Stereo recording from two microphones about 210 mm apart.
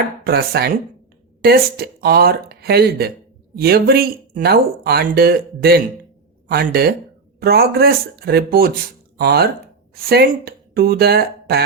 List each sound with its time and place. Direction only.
0.3 s speech: 50° right (ahead or behind)